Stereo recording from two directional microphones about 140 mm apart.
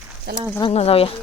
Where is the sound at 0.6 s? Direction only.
40° left (ahead or behind).